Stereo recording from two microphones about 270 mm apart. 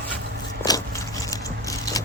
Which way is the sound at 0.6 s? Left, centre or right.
Centre.